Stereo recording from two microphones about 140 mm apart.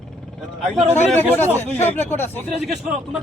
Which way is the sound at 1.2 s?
15° left (ahead or behind).